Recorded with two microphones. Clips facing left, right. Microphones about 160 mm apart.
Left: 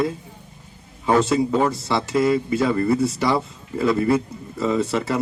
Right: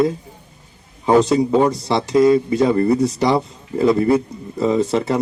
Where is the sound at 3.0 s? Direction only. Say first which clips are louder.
Right 4 dB; 35° right (ahead or behind).